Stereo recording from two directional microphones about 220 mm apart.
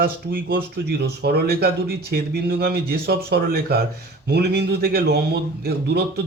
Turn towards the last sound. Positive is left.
turn(degrees=-45)  # may be behind; listen again after turning